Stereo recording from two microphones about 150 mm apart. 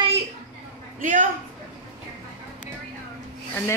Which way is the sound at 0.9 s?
60° right (ahead or behind).